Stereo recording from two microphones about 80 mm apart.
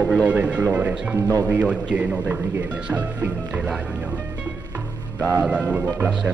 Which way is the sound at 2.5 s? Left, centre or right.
Right.